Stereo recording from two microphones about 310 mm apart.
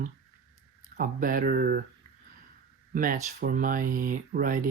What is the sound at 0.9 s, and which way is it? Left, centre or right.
Speech, right.